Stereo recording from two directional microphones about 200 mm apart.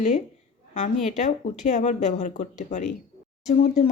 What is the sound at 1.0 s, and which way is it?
Speech, 40° left (ahead or behind).